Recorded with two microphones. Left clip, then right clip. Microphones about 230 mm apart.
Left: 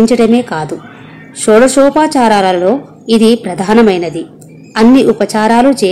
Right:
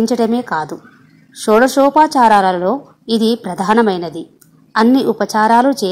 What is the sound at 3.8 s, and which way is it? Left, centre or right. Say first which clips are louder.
Speech: left 6 dB; centre.